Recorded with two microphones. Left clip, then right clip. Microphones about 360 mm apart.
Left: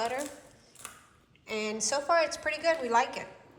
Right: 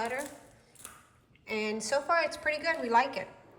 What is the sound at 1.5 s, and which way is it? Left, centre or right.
A woman's voice, centre.